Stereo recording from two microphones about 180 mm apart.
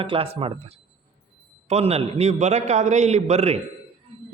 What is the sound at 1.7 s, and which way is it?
A man's voice, 35° right (ahead or behind).